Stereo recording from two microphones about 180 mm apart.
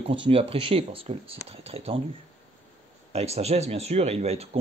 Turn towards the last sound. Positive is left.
turn(degrees=-35)  # may be behind; listen again after turning